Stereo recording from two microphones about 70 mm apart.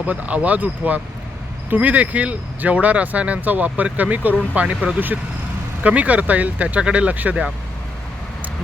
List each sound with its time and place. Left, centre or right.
0.0 s speech: right